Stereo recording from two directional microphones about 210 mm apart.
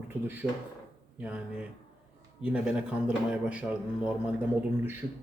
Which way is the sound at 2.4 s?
5° right (ahead or behind).